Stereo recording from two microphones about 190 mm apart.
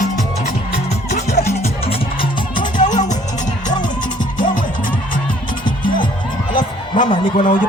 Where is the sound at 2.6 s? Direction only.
40° left (ahead or behind).